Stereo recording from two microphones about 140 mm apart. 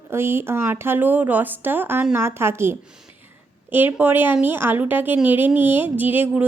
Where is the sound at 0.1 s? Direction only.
15° right (ahead or behind).